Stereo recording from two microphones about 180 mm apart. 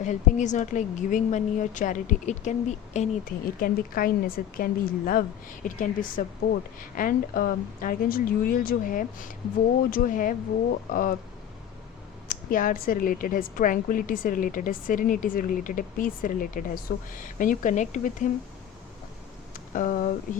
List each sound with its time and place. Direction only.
0.0 s a woman's voice: 45° left (ahead or behind)
12.3 s a woman's voice: 50° left (ahead or behind)
19.5 s a sound: 50° left (ahead or behind)